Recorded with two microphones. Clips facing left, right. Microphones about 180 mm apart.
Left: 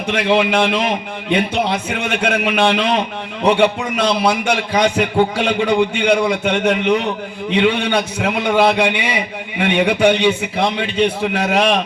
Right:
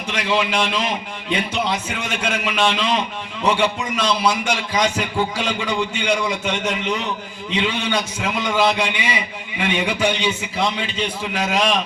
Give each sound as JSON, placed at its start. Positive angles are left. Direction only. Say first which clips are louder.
{"t": 0.1, "sound": "a man's voice", "louder": "left 6 dB", "side_deg": 60}